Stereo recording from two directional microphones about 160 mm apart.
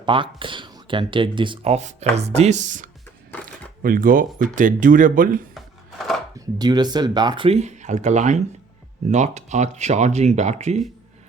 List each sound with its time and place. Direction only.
0.0 s speech: 30° right (ahead or behind); by 5.4 s 60° right (ahead or behind)
6.4 s speech: 25° right (ahead or behind); by 10.8 s 45° right (ahead or behind)